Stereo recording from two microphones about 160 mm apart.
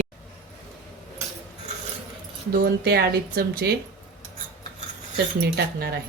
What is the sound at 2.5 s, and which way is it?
Speech, 70° right (ahead or behind).